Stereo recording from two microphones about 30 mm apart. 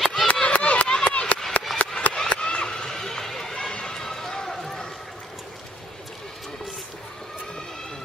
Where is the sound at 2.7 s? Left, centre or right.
Centre.